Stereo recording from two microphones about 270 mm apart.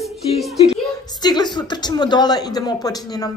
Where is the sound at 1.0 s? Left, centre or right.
Centre.